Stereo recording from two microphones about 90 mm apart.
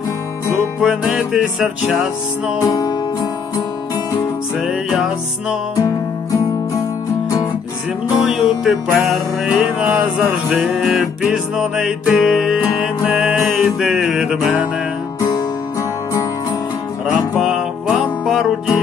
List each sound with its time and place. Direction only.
0.8 s music: 5° right (ahead or behind)
2.6 s music: 40° left (ahead or behind)
4.6 s music: centre (ahead or behind)
5.8 s music: 35° left (ahead or behind)
8.2 s music: 5° right (ahead or behind)
9.8 s music: 10° right (ahead or behind)
10.6 s music: centre (ahead or behind)
17.0 s music: 5° right (ahead or behind)